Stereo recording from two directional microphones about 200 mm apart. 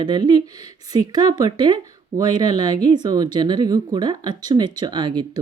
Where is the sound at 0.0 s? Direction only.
20° right (ahead or behind).